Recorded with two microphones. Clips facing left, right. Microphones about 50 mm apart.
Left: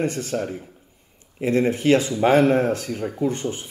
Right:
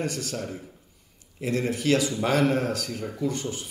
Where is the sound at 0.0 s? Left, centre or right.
Left.